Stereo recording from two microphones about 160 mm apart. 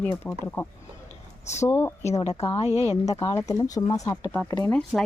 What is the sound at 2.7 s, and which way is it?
Speech, 40° left (ahead or behind).